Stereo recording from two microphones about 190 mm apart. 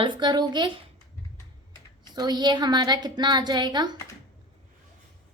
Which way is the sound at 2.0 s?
20° right (ahead or behind).